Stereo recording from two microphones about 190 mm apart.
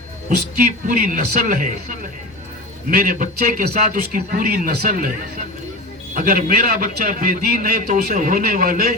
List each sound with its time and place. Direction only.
0.9 s a man's voice: 50° right (ahead or behind)
2.9 s a man's voice: 50° right (ahead or behind)
6.1 s a man's voice: 50° right (ahead or behind)